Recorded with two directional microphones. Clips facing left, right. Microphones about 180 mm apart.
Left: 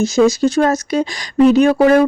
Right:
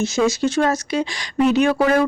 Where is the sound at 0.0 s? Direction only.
40° left (ahead or behind).